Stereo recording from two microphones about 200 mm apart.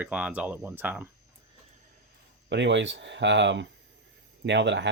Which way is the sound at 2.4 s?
60° right (ahead or behind).